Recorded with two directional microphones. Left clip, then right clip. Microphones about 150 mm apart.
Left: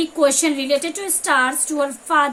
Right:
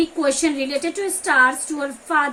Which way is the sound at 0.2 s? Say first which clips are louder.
Left 3 dB; 90° left.